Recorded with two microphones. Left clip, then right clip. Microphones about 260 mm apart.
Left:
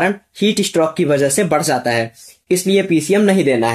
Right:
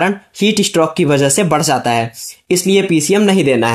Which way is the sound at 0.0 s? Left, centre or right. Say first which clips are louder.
Right 2 dB; right.